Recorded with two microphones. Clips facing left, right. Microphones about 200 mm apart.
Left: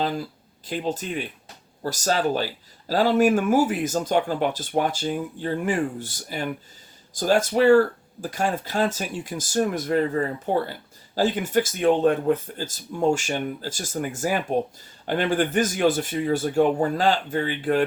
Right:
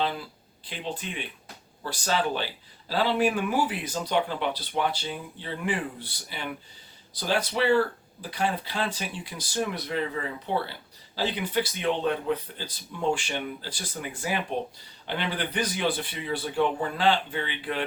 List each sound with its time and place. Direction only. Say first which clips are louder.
0.0 s speech: left 3 dB; 40° left (ahead or behind)